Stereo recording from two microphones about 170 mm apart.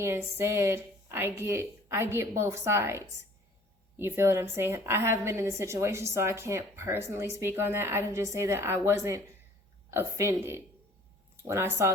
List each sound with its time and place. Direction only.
0.0 s a woman's voice: 15° right (ahead or behind)